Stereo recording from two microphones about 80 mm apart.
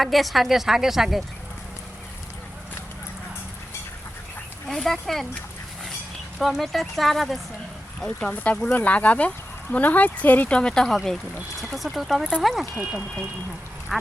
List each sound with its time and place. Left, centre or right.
0.0 s speech: centre
4.7 s speech: centre
6.4 s speech: centre
8.0 s speech: centre